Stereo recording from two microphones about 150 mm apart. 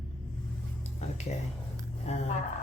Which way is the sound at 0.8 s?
50° left (ahead or behind).